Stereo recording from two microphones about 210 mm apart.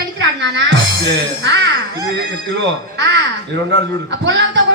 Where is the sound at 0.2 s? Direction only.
60° right (ahead or behind).